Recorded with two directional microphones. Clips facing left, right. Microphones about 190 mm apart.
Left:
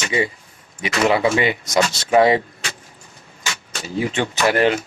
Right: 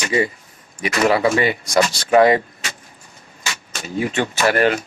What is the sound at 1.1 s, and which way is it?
Speech, 15° left (ahead or behind).